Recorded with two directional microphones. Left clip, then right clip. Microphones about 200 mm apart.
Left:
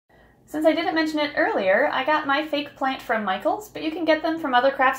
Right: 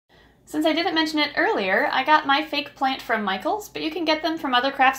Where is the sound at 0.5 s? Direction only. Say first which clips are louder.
Left 1 dB; 35° right (ahead or behind).